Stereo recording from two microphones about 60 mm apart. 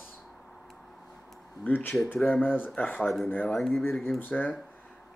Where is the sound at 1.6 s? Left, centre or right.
Left.